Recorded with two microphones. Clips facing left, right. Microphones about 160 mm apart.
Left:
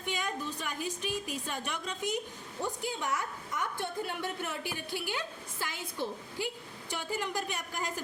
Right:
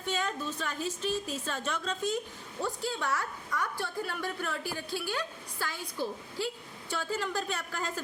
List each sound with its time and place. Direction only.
0.0 s a woman's voice: 15° left (ahead or behind)